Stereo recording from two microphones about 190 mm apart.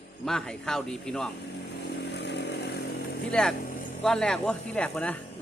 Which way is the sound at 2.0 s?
60° left (ahead or behind).